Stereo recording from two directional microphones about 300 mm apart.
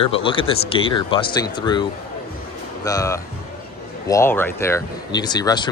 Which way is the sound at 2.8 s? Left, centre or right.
Centre.